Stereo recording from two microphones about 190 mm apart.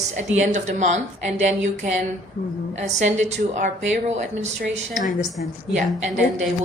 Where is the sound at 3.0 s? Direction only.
40° right (ahead or behind).